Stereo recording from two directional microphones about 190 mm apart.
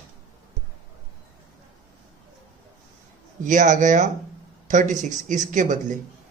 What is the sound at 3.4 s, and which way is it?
Speech, 40° right (ahead or behind).